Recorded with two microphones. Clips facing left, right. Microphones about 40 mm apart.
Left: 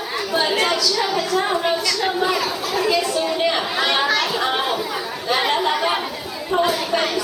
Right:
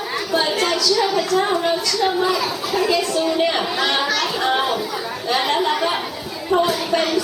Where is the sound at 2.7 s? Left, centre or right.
Centre.